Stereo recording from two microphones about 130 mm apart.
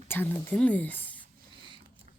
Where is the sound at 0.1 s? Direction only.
15° left (ahead or behind).